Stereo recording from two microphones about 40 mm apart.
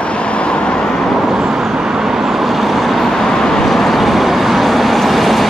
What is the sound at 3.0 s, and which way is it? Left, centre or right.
Vehicle, centre.